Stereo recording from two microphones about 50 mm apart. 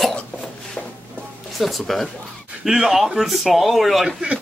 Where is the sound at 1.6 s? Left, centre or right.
Centre.